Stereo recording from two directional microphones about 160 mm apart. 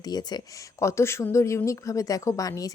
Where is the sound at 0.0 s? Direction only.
25° left (ahead or behind).